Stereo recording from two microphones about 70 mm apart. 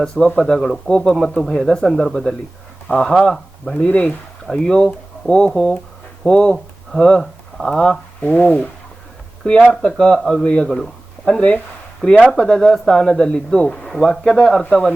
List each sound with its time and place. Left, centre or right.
0.0 s speech: centre
3.8 s speech: centre